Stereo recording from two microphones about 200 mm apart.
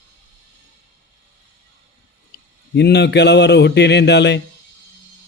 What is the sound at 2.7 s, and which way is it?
Speech, 55° left (ahead or behind).